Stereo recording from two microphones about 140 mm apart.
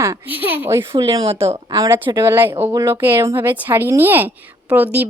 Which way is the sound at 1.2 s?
45° right (ahead or behind).